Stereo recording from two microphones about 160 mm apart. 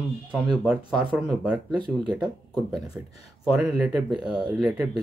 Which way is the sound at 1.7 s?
30° right (ahead or behind).